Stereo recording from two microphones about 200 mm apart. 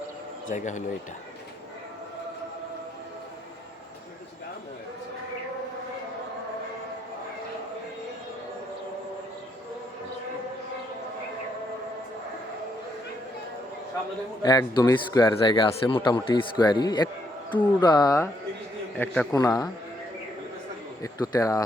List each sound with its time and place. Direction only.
0.5 s speech: 40° left (ahead or behind)
14.4 s a man's voice: 15° left (ahead or behind)
21.0 s a man's voice: 15° left (ahead or behind)